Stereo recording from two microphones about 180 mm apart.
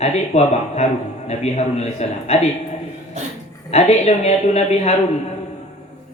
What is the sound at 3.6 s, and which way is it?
A man's voice, 35° left (ahead or behind).